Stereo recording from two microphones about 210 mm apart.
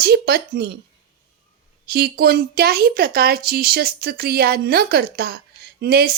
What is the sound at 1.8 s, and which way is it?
Speech, 50° right (ahead or behind).